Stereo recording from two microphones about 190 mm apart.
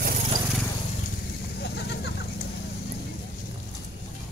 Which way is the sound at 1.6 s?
60° left (ahead or behind).